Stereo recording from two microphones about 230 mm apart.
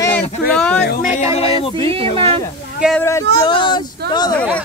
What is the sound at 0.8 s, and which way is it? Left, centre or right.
Music, left.